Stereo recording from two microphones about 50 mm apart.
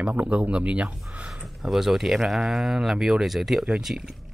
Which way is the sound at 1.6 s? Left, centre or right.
Centre.